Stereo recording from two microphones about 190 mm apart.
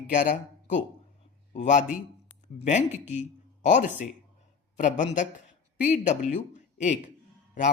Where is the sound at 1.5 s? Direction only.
40° left (ahead or behind).